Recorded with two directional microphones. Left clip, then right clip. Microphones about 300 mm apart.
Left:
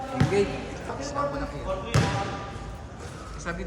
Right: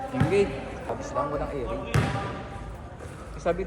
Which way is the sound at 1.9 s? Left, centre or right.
Centre.